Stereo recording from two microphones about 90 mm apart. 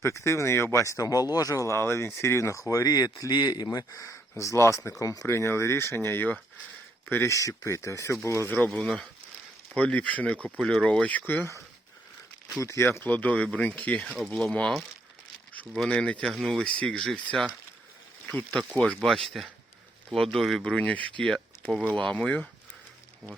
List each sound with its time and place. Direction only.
0.0 s speech: 35° left (ahead or behind)
5.3 s speech: 30° left (ahead or behind)
9.7 s speech: 15° left (ahead or behind)
12.6 s speech: 30° left (ahead or behind)
14.0 s speech: 5° left (ahead or behind)
15.7 s speech: 5° left (ahead or behind)
16.3 s speech: centre (ahead or behind)
16.6 s speech: 15° left (ahead or behind)
18.5 s speech: 5° left (ahead or behind)
20.7 s speech: 15° left (ahead or behind)